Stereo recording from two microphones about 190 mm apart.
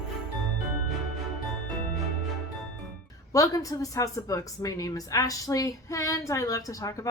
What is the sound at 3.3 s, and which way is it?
Speech, 20° left (ahead or behind).